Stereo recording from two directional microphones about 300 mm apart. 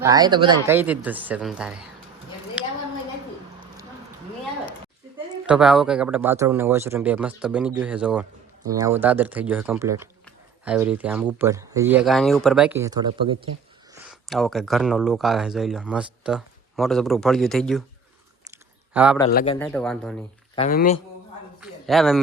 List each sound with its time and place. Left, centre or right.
0.0 s speech: centre
2.6 s a sound: centre
5.5 s speech: centre
13.9 s speech: centre
18.5 s a sound: centre
19.3 s a man's voice: left
19.5 s speech: centre
20.6 s a man's voice: left
21.6 s a man's voice: centre